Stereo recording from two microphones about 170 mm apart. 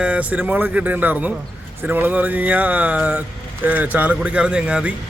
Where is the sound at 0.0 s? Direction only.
5° right (ahead or behind).